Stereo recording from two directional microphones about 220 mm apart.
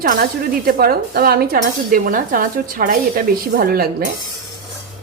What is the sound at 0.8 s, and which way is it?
Speech, 45° right (ahead or behind).